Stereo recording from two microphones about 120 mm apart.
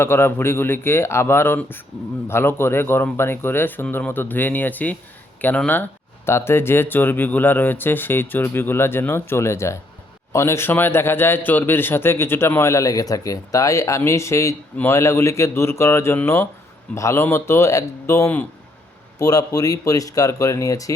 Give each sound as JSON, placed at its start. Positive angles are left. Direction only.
{"t": 0.0, "sound": "a man's voice", "side_deg": 20}
{"t": 19.2, "sound": "a man's voice", "side_deg": 30}